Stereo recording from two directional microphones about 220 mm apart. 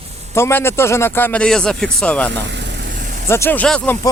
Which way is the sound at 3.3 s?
10° left (ahead or behind).